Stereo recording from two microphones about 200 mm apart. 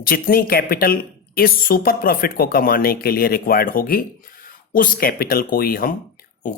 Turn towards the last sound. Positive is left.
turn(degrees=45)  # may be behind; listen again after turning